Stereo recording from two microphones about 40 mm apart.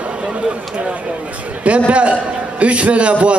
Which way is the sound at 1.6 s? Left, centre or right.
Right.